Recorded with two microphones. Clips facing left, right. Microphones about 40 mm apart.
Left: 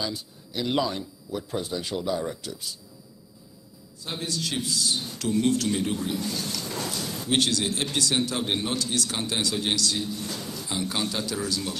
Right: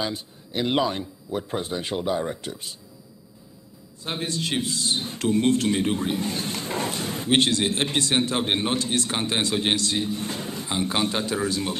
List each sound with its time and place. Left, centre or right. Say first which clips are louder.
0.0 s a man's voice: right 3 dB; right
4.0 s a man's voice: right 3 dB; right